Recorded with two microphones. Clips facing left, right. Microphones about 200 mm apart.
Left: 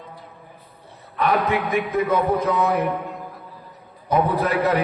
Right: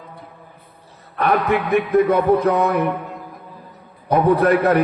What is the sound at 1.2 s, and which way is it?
Speech, 60° right (ahead or behind).